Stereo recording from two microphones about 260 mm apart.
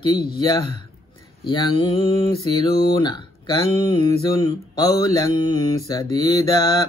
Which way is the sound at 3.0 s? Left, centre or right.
Centre.